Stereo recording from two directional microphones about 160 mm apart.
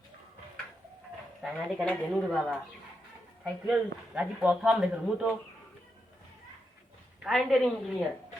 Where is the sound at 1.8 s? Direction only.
5° left (ahead or behind).